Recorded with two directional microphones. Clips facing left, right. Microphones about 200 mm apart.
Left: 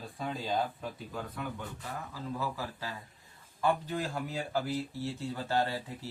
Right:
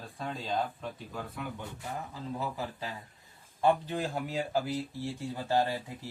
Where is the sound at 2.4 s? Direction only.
20° right (ahead or behind).